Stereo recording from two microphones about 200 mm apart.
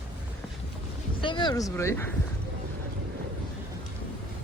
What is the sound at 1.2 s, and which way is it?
Speech, 25° left (ahead or behind).